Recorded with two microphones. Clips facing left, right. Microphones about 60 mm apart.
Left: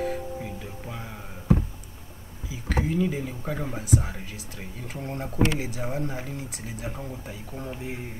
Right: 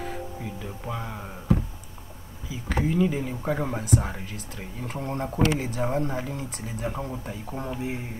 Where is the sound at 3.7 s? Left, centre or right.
Centre.